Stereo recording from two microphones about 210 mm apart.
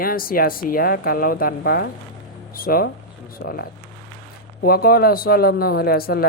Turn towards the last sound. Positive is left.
turn(degrees=45)  # may be behind; listen again after turning